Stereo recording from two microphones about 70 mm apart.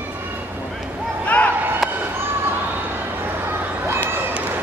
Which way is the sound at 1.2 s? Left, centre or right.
Left.